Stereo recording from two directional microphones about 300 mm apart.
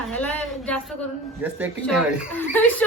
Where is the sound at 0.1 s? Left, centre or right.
Centre.